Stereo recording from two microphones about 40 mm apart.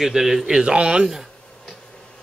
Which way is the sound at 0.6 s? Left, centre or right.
Right.